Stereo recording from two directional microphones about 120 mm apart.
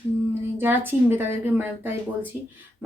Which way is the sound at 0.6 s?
15° right (ahead or behind).